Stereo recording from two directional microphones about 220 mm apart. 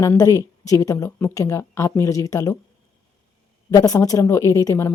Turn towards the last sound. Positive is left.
turn(degrees=10)  # may be behind; listen again after turning